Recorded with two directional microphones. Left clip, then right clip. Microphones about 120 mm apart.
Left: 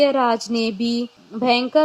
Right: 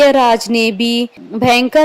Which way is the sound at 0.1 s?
55° right (ahead or behind).